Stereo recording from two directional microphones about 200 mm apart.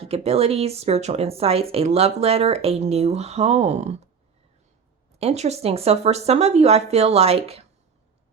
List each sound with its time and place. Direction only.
0.0 s speech: 30° right (ahead or behind)
5.2 s speech: 35° right (ahead or behind)